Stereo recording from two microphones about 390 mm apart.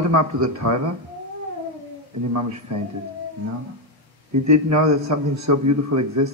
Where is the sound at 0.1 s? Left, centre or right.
Right.